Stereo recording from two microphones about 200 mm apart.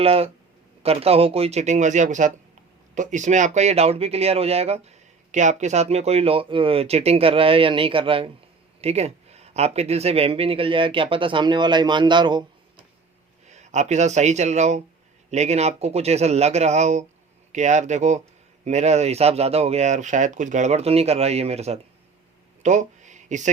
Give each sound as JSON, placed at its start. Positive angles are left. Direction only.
{"t": 0.0, "sound": "speech", "side_deg": -30}
{"t": 13.5, "sound": "speech", "side_deg": -35}
{"t": 22.6, "sound": "a sound", "side_deg": -35}